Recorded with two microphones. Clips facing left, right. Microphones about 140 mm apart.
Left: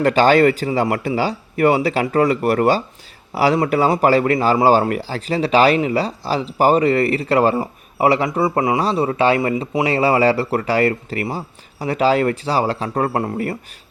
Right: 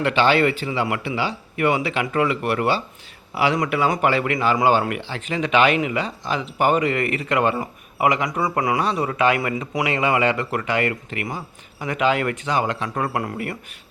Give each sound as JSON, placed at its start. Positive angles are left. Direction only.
{"t": 0.0, "sound": "a man's voice", "side_deg": 40}